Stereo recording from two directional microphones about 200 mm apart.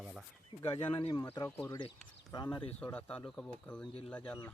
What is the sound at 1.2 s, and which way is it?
Speech, 10° left (ahead or behind).